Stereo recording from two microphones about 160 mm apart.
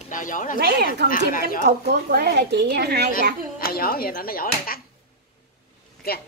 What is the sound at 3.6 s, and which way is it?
Speech, 65° left (ahead or behind).